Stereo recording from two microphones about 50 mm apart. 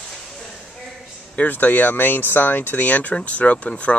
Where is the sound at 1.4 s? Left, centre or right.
Left.